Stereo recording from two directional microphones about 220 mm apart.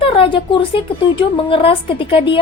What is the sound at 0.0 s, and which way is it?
Speech, 25° left (ahead or behind).